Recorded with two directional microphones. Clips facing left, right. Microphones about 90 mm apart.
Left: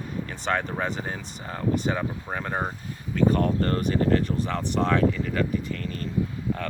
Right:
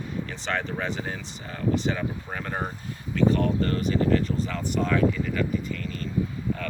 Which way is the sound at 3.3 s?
40° left (ahead or behind).